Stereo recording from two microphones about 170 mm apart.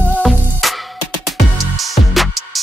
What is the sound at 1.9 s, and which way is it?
Music, centre (ahead or behind).